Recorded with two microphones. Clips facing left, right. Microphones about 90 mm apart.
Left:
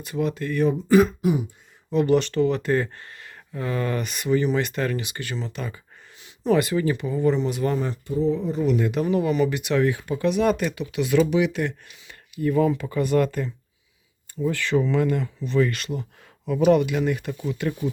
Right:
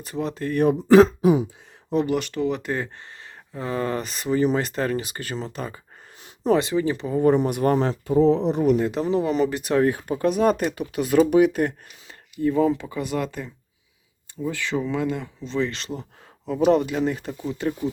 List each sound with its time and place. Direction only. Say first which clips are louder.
0.0 s speech: left 1 dB; 35° right (ahead or behind)
0.9 s speech: right 5 dB; 90° right
2.0 s speech: left 4 dB; 10° right (ahead or behind)
3.2 s speech: left 1 dB; 25° right (ahead or behind)
6.2 s a sound: right 1 dB; 40° right (ahead or behind)
6.6 s speech: even; 25° right (ahead or behind)
7.2 s speech: right 5 dB; 50° right (ahead or behind)
7.8 s speech: right 6 dB; 90° right
8.6 s speech: left 1 dB; 35° right (ahead or behind)
12.4 s speech: right 1 dB; 20° right (ahead or behind)